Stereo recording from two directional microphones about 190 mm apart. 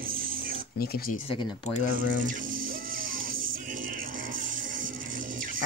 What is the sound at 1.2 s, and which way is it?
Speech, 25° left (ahead or behind).